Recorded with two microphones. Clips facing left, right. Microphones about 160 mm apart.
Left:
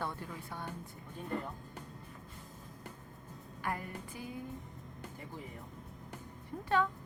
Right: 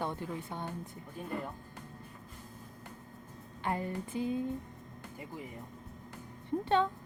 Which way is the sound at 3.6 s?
25° right (ahead or behind).